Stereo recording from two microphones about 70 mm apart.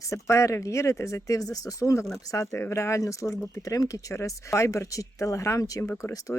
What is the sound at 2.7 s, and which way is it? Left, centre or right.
Speech, left.